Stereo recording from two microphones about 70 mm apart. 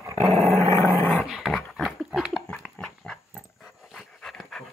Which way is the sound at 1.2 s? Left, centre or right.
Centre.